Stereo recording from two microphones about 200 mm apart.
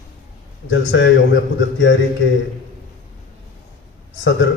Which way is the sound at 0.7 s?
65° left (ahead or behind).